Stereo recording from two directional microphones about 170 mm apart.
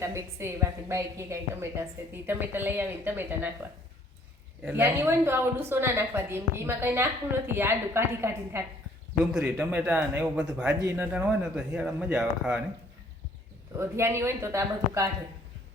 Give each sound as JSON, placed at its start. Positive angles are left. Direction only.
{"t": 0.0, "sound": "a woman's voice", "side_deg": -15}
{"t": 4.6, "sound": "a woman's voice", "side_deg": -15}
{"t": 13.7, "sound": "a woman's voice", "side_deg": -15}